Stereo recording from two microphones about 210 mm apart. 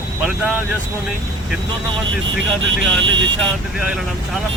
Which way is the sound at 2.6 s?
65° right (ahead or behind).